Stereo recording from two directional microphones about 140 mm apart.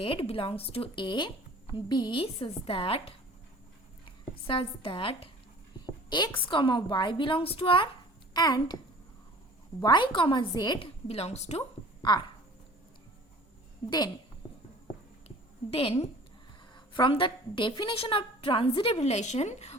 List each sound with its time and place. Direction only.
0.0 s a woman's voice: 40° left (ahead or behind)
8.3 s a woman's voice: 30° left (ahead or behind)
9.8 s a woman's voice: 35° left (ahead or behind); by 11.6 s 50° left (ahead or behind)
15.7 s a woman's voice: 45° left (ahead or behind)